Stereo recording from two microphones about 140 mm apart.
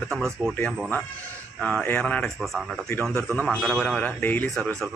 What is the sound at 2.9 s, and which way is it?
A man's voice, 10° left (ahead or behind).